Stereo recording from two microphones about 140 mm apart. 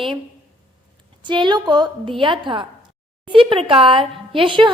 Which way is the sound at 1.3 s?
35° right (ahead or behind).